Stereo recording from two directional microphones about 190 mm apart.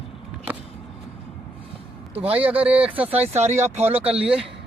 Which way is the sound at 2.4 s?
5° right (ahead or behind).